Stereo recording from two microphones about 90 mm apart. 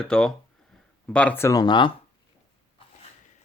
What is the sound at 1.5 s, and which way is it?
Speech, 45° left (ahead or behind).